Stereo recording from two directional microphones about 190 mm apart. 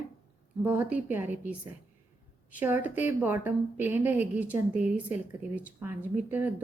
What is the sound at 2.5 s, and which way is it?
A woman's voice, 10° right (ahead or behind).